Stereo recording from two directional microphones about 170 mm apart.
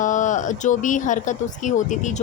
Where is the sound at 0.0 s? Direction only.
45° left (ahead or behind).